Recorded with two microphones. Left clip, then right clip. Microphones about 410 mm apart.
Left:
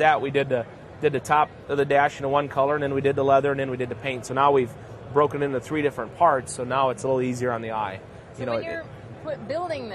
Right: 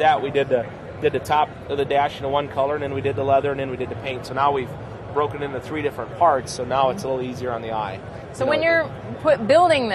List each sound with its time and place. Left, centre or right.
0.0 s a man's voice: left
8.5 s speech: right